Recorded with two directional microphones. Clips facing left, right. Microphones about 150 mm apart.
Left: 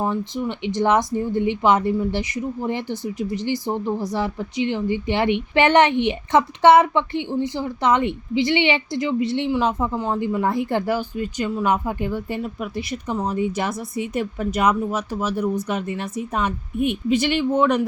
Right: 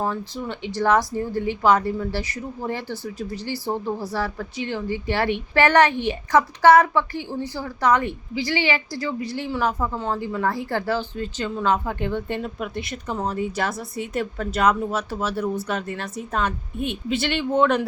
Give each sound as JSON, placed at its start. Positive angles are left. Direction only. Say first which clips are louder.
{"t": 0.0, "sound": "speech", "louder": "left 3 dB", "side_deg": 15}